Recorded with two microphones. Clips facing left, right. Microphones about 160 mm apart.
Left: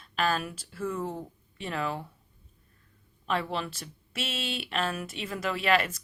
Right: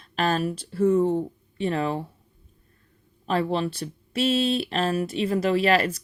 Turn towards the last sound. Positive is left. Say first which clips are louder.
# right 6 dB
turn(degrees=-35)  # may be behind; listen again after turning